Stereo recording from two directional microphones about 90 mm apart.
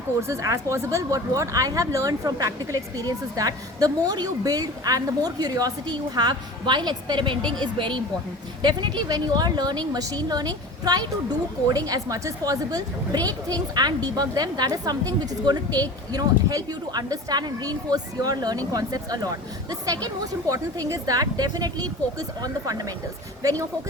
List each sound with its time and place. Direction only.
0.2 s speech: 35° right (ahead or behind)
23.4 s speech: 40° right (ahead or behind)